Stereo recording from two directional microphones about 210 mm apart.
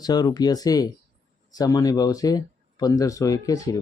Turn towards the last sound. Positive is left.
turn(degrees=15)  # may be behind; listen again after turning